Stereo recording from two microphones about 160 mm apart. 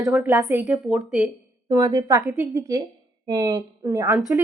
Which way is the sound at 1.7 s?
20° right (ahead or behind).